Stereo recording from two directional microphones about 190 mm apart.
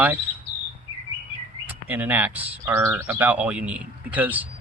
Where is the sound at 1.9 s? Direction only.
10° right (ahead or behind).